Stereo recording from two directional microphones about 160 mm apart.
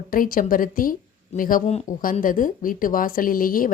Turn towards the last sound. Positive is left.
turn(degrees=60)  # may be behind; listen again after turning